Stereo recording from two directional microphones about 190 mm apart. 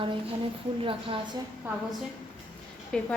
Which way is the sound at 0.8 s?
30° right (ahead or behind).